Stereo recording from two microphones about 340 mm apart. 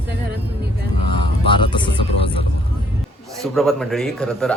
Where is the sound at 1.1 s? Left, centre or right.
Centre.